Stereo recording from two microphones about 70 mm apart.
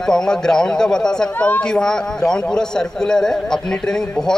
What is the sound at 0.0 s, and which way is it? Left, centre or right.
A man's voice, centre.